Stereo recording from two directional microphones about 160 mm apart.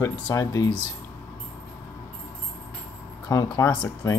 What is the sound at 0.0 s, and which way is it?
Speech, 20° left (ahead or behind).